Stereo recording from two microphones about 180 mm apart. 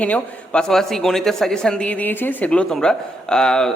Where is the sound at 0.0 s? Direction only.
5° left (ahead or behind).